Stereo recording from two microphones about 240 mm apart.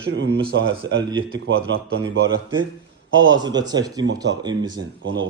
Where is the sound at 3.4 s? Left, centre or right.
Centre.